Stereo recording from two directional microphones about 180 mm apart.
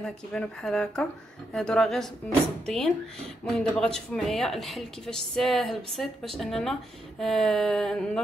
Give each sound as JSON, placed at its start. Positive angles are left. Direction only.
{"t": 0.0, "sound": "speech", "side_deg": 5}